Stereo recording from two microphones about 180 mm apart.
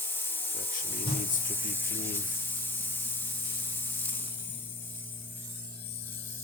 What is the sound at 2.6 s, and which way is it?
Spray, 10° left (ahead or behind).